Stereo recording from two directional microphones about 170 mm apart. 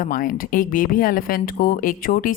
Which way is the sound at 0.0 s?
55° left (ahead or behind).